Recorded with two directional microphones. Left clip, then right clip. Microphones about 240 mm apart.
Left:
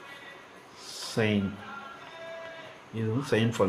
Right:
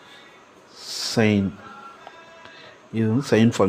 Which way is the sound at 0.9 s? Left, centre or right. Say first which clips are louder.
Right 8 dB; right.